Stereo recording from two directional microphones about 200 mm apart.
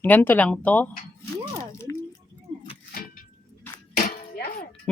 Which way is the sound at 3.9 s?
40° left (ahead or behind).